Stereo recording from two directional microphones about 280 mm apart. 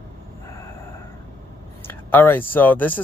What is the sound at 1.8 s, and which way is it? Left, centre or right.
Speech, centre.